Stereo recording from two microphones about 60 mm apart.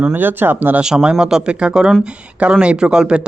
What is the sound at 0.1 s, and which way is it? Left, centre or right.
Speech, right.